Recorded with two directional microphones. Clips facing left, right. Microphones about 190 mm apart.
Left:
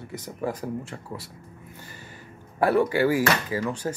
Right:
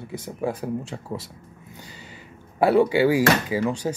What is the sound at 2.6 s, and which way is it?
Speech, 15° right (ahead or behind).